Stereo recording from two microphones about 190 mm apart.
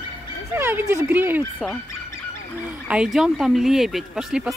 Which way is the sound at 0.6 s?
15° right (ahead or behind).